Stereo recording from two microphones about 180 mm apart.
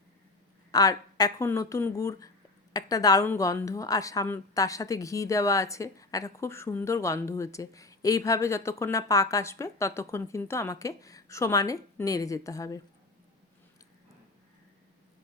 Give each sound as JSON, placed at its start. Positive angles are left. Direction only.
{"t": 0.7, "sound": "a woman's voice", "side_deg": 20}